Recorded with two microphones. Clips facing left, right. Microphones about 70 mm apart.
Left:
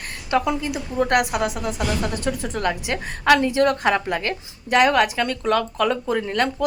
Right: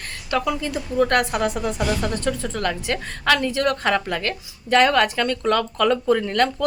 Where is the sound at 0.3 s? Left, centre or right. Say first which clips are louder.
Left 2 dB; left; by 2.1 s centre.